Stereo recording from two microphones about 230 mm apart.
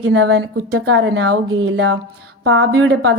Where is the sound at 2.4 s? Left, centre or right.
Right.